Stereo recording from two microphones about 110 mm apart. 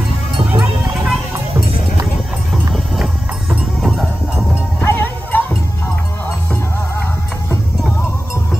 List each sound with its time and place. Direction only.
0.6 s music: 5° right (ahead or behind)
3.8 s music: centre (ahead or behind)
4.7 s music: 15° left (ahead or behind)